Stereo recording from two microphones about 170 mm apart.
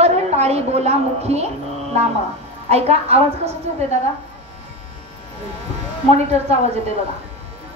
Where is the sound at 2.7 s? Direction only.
40° right (ahead or behind).